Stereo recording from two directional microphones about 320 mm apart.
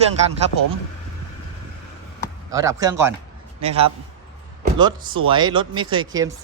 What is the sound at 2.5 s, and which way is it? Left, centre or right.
A man's voice, centre.